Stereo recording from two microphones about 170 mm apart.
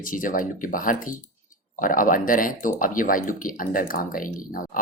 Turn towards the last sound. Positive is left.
turn(degrees=55)  # may be behind; listen again after turning